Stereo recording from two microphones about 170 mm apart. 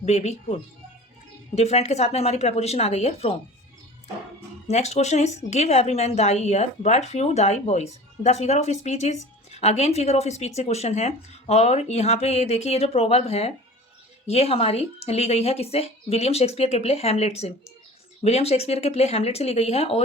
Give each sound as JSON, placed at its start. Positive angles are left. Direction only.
{"t": 0.0, "sound": "a woman's voice", "side_deg": 40}
{"t": 4.7, "sound": "a woman's voice", "side_deg": 40}